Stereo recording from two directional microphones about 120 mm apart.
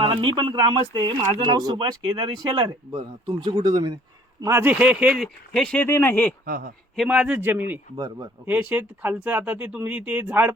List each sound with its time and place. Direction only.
0.0 s speech: 45° right (ahead or behind)
2.9 s speech: 45° right (ahead or behind)
4.4 s speech: 20° right (ahead or behind)
5.2 s speech: 5° left (ahead or behind)
5.9 s speech: 20° left (ahead or behind)
6.9 s speech: 5° right (ahead or behind)
7.9 s speech: 35° right (ahead or behind)
8.4 s speech: 10° right (ahead or behind)